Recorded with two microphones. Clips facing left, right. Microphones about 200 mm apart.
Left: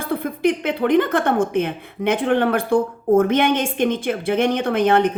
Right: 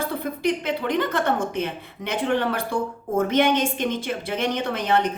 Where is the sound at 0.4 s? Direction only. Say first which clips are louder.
Left 5 dB; 55° left (ahead or behind).